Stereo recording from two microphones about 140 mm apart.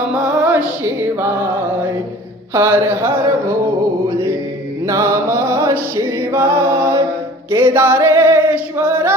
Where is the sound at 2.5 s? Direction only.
15° right (ahead or behind).